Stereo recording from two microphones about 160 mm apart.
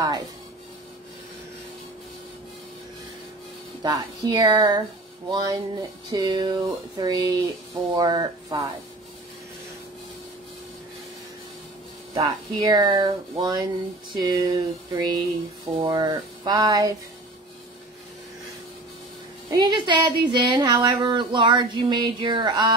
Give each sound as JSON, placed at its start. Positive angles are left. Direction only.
{"t": 3.8, "sound": "speech", "side_deg": -25}
{"t": 12.2, "sound": "speech", "side_deg": -25}
{"t": 19.5, "sound": "speech", "side_deg": -25}